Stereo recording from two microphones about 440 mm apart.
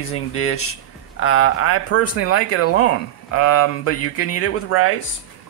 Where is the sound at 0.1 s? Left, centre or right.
Left.